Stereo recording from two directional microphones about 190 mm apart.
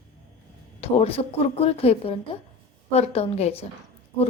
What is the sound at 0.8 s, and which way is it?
A woman's voice, 30° left (ahead or behind).